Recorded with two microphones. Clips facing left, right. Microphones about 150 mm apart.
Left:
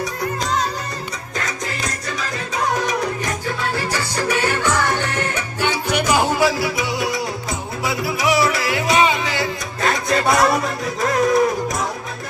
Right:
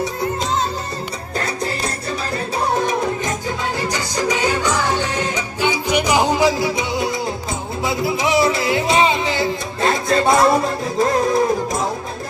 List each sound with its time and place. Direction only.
1.4 s music: 30° right (ahead or behind)